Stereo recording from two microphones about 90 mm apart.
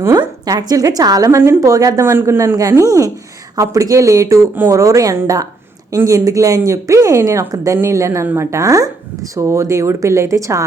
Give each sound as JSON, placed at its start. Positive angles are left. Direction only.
{"t": 0.1, "sound": "speech", "side_deg": -50}
{"t": 2.0, "sound": "speech", "side_deg": -25}
{"t": 2.6, "sound": "speech", "side_deg": -40}
{"t": 5.1, "sound": "speech", "side_deg": -25}
{"t": 6.1, "sound": "speech", "side_deg": -40}